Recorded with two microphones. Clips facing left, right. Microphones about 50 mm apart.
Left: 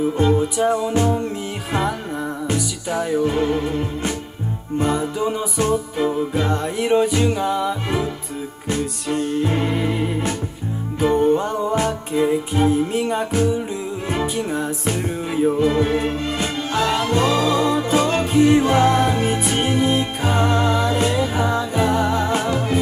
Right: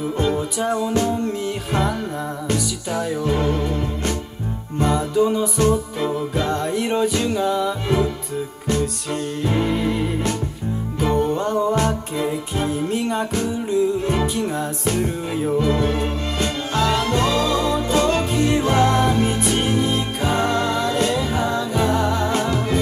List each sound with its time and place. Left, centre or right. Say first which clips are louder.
0.2 s music: left 3 dB; centre
9.4 s music: even; left
18.5 s music: left 4 dB; left
18.8 s music: left 1 dB; centre